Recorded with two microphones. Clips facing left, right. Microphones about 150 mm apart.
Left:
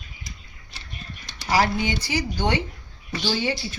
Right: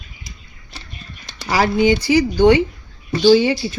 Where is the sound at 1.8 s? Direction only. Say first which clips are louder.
Right 12 dB; 90° right.